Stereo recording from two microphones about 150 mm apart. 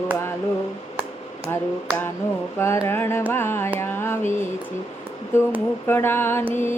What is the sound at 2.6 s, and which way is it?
Mantra, 15° left (ahead or behind).